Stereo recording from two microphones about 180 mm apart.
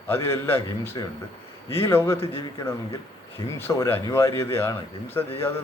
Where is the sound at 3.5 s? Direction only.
10° left (ahead or behind).